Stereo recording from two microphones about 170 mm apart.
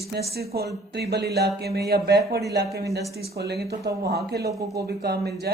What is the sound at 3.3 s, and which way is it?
A woman's voice, 70° right (ahead or behind).